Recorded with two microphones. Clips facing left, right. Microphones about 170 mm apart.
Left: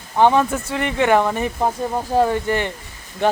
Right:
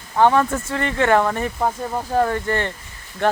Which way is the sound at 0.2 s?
15° left (ahead or behind).